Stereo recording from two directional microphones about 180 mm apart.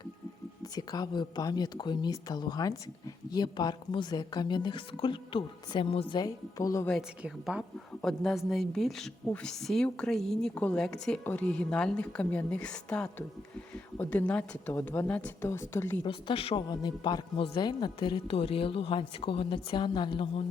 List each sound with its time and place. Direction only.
0.8 s speech: 25° left (ahead or behind)
7.2 s a woman's voice: 5° right (ahead or behind); by 16.0 s 15° left (ahead or behind)
16.0 s speech: 30° left (ahead or behind)